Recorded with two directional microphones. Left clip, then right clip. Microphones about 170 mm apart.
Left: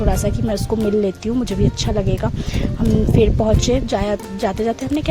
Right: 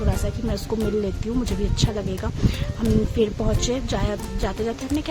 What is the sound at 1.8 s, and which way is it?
Speech, 40° left (ahead or behind).